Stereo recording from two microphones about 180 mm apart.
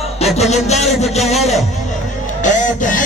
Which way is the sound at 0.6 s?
40° left (ahead or behind).